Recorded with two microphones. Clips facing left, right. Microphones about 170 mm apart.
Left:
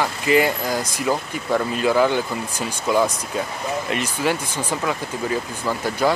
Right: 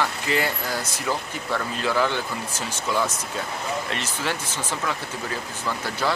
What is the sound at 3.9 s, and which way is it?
Speech, 15° left (ahead or behind).